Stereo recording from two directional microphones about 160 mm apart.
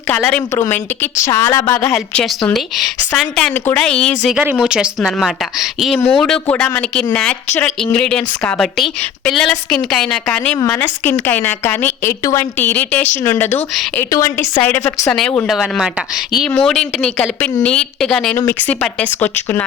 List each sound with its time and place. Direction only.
0.1 s a woman's voice: 5° left (ahead or behind)
0.5 s a woman's voice: 15° left (ahead or behind)
1.9 s a woman's voice: 5° left (ahead or behind)